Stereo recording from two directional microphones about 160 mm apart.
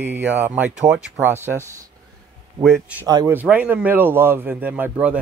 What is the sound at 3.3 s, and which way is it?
Speech, 10° right (ahead or behind).